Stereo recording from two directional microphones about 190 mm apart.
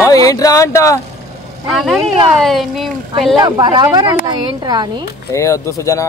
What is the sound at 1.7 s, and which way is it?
Speech, centre (ahead or behind).